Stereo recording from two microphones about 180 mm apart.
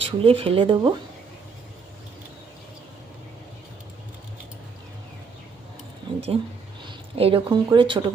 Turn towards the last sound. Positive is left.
turn(degrees=-25)  # may be behind; listen again after turning